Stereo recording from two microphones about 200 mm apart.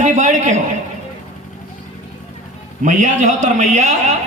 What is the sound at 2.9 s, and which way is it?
A man's voice, 35° right (ahead or behind).